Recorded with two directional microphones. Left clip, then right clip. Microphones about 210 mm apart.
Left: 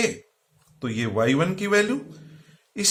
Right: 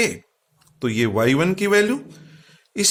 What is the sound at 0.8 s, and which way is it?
Speech, 40° right (ahead or behind).